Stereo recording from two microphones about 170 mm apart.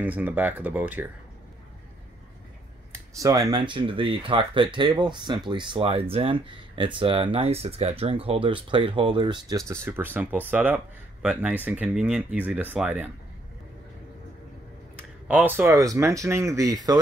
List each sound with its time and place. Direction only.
0.0 s speech: 10° right (ahead or behind)
3.2 s speech: 20° right (ahead or behind)
9.7 s speech: 10° right (ahead or behind)
15.0 s speech: 10° right (ahead or behind)